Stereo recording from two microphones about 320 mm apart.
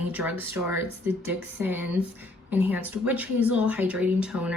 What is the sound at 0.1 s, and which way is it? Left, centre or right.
Speech, centre.